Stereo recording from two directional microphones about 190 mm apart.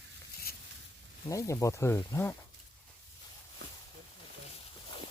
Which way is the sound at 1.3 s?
15° left (ahead or behind).